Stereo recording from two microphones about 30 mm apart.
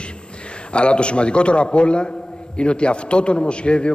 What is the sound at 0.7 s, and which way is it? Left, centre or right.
A man's voice, left.